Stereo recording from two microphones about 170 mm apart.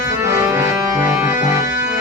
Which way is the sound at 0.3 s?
15° right (ahead or behind).